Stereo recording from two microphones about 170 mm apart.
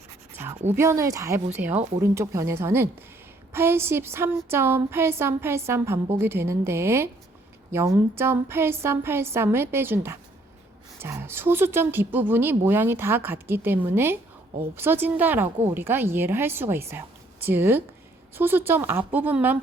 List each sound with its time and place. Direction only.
0.7 s speech: 15° right (ahead or behind)